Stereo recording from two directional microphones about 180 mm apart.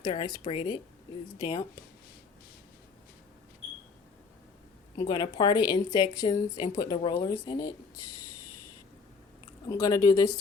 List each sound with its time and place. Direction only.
0.0 s a woman's voice: 25° left (ahead or behind)
4.9 s a woman's voice: 25° left (ahead or behind)
9.6 s a woman's voice: 20° left (ahead or behind)